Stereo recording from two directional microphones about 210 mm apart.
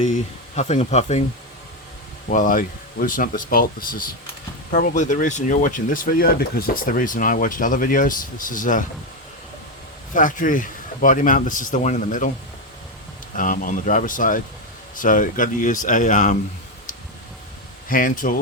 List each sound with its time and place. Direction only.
0.5 s speech: 35° left (ahead or behind)
2.2 s speech: 40° left (ahead or behind)
10.2 s speech: 40° left (ahead or behind)
13.3 s speech: 40° left (ahead or behind)
17.8 s speech: 40° left (ahead or behind)